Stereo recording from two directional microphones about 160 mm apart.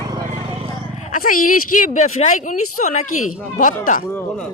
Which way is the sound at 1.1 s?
60° left (ahead or behind).